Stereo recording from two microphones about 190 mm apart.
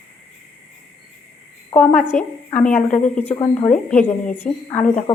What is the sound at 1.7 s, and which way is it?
Speech, 5° left (ahead or behind).